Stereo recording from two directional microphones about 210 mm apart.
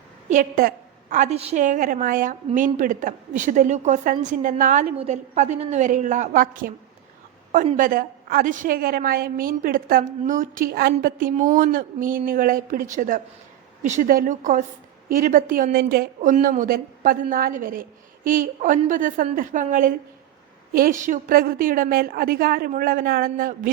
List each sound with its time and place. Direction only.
0.3 s a woman's voice: 40° right (ahead or behind)